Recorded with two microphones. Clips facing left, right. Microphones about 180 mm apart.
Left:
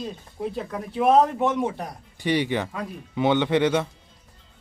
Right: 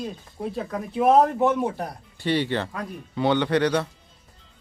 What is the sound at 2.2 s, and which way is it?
Speech, 15° left (ahead or behind).